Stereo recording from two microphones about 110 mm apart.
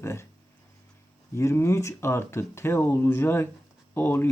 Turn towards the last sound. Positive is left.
turn(degrees=20)  # may be behind; listen again after turning